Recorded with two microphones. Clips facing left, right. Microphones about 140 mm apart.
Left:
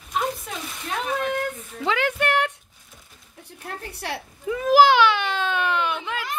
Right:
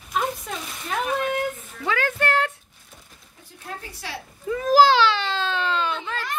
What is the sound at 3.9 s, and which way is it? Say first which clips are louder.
Speech: left 4 dB; 65° left (ahead or behind).